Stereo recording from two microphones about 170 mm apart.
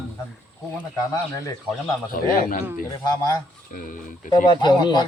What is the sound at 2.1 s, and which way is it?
Speech, 55° left (ahead or behind).